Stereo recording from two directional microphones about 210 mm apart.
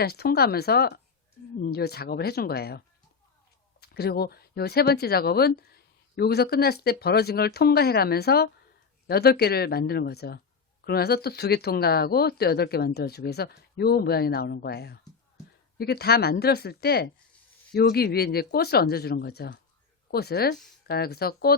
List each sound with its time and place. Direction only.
0.0 s speech: 50° left (ahead or behind)